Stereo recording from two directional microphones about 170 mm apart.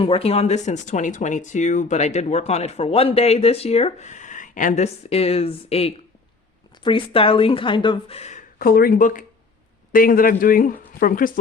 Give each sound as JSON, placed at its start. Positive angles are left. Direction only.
{"t": 0.0, "sound": "speech", "side_deg": 35}
{"t": 8.5, "sound": "speech", "side_deg": 60}